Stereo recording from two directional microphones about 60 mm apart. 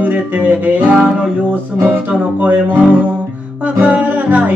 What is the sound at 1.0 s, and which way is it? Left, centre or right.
Music, centre.